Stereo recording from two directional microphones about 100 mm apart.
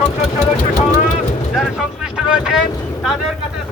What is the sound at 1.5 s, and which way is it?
A man's voice, centre (ahead or behind).